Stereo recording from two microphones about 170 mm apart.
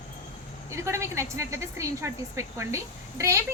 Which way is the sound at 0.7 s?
15° right (ahead or behind).